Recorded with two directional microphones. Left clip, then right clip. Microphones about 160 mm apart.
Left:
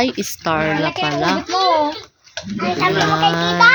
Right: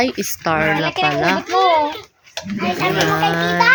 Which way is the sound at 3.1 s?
10° left (ahead or behind).